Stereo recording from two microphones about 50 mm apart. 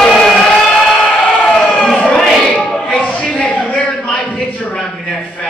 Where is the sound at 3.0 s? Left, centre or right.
Left.